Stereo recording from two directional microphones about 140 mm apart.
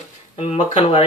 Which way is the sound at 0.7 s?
45° left (ahead or behind).